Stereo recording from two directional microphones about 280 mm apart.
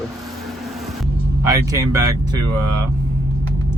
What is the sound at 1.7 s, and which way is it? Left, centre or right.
Speech, centre.